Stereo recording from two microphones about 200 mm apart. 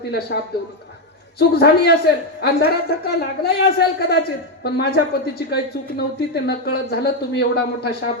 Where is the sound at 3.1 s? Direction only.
50° left (ahead or behind).